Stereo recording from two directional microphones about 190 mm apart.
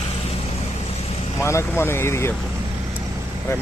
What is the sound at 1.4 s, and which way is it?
Speech, 15° left (ahead or behind).